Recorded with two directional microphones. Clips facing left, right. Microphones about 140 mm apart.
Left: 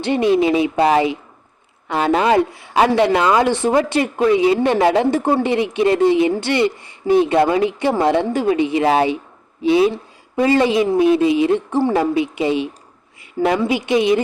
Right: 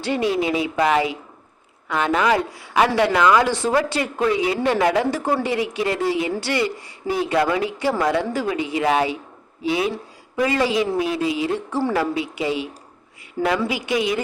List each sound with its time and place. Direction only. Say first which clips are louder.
0.0 s a woman's voice: left 6 dB; 20° left (ahead or behind)